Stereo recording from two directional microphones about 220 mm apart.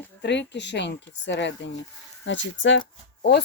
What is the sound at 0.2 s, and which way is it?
Speech, 55° left (ahead or behind).